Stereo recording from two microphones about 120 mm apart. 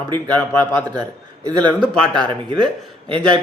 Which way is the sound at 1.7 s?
5° left (ahead or behind).